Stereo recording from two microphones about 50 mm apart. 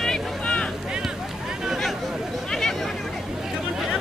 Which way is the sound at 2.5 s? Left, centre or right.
Centre.